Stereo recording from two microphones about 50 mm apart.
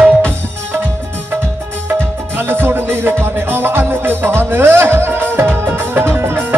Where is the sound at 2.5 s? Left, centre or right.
Right.